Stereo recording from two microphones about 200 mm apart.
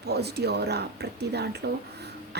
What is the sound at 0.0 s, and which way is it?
A woman's voice, 55° right (ahead or behind).